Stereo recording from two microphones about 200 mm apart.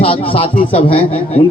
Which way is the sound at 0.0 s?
25° left (ahead or behind).